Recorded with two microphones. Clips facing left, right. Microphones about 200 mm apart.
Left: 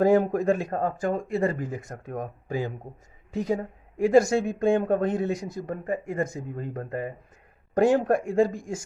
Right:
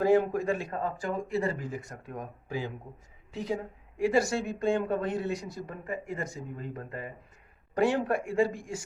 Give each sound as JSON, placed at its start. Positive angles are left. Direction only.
{"t": 0.0, "sound": "speech", "side_deg": 45}